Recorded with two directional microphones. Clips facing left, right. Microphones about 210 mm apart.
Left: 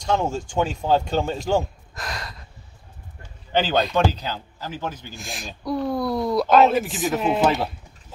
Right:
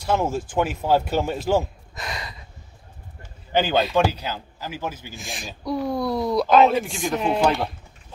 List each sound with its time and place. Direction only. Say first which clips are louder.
0.0 s a man's voice: even; 5° right (ahead or behind)